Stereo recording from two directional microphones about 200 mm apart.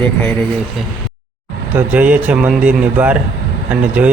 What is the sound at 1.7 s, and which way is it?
Speech, 5° right (ahead or behind).